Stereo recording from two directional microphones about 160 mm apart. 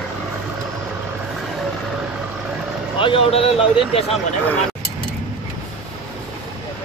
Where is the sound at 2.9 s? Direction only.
35° left (ahead or behind).